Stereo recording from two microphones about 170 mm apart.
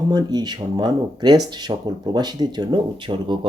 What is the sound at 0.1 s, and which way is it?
Speech, 20° right (ahead or behind).